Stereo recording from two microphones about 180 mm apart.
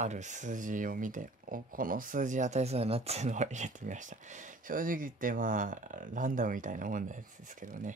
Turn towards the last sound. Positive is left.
turn(degrees=-45)  # may be behind; listen again after turning